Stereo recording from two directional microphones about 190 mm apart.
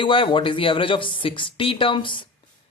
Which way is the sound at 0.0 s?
25° left (ahead or behind).